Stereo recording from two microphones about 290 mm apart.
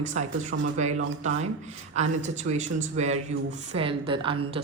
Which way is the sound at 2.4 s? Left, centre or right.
Right.